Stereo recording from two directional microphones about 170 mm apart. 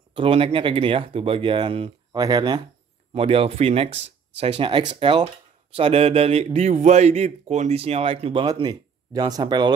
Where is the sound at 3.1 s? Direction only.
35° right (ahead or behind).